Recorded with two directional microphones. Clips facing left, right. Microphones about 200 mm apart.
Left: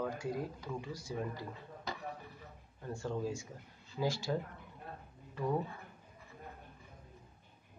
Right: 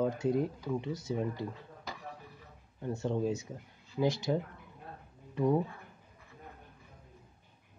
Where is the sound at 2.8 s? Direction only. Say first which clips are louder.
Right 6 dB; 20° right (ahead or behind).